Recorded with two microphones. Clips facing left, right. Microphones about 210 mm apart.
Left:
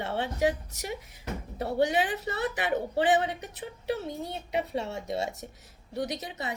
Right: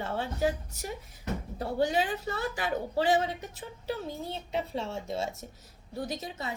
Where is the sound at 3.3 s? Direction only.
70° left (ahead or behind).